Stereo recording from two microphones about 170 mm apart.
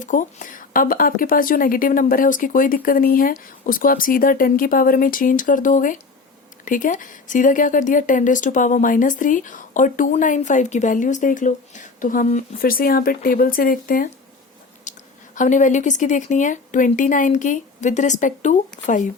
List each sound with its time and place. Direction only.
0.0 s speech: 50° left (ahead or behind)
14.9 s a sound: 45° left (ahead or behind)
15.4 s speech: 45° left (ahead or behind)